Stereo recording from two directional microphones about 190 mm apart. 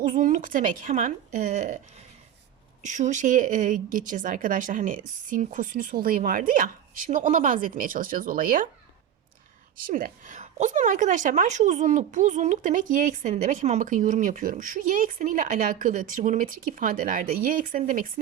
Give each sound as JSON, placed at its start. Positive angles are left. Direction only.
{"t": 0.0, "sound": "a woman's voice", "side_deg": -45}
{"t": 2.8, "sound": "a woman's voice", "side_deg": -40}
{"t": 9.9, "sound": "a woman's voice", "side_deg": -45}